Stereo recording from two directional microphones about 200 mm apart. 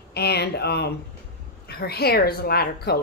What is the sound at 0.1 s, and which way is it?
Speech, 55° left (ahead or behind).